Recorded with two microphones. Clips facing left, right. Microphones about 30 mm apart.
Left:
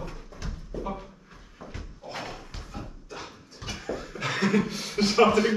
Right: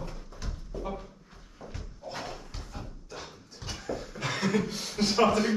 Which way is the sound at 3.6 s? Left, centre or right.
Left.